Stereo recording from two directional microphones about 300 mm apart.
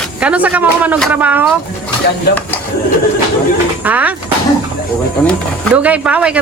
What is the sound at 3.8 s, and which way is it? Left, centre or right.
Speech, centre.